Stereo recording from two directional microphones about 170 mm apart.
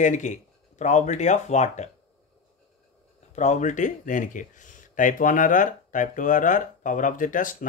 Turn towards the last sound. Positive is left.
turn(degrees=50)  # may be behind; listen again after turning